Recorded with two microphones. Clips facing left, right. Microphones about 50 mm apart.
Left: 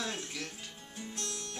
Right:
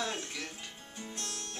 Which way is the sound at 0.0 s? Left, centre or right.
Centre.